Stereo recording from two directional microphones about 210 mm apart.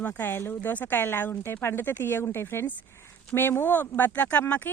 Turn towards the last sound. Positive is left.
turn(degrees=5)  # may be behind; listen again after turning